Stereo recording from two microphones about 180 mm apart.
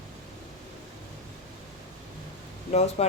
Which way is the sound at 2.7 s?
35° left (ahead or behind).